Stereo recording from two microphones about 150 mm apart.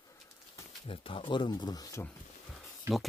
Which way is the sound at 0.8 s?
35° left (ahead or behind).